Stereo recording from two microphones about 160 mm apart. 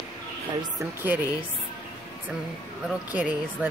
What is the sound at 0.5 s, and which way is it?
Speech, 30° right (ahead or behind).